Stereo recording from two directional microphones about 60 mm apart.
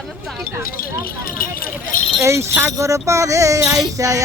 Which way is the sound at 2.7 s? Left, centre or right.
Right.